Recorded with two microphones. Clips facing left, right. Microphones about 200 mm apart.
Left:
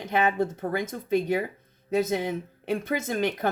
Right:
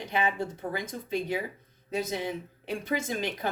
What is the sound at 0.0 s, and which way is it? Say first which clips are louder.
Speech: left 5 dB; 50° left (ahead or behind).